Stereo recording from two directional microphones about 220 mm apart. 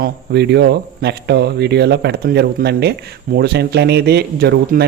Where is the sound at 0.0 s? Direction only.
50° right (ahead or behind).